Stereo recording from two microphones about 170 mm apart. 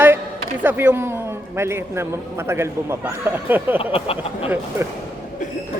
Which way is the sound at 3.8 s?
35° left (ahead or behind).